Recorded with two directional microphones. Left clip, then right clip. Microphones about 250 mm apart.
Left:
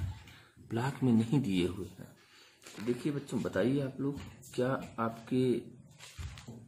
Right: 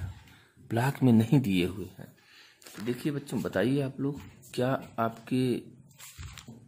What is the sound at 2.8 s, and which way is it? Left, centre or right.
Speech, right.